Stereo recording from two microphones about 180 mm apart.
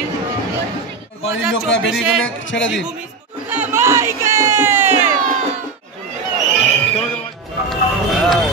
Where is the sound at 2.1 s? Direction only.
90° left.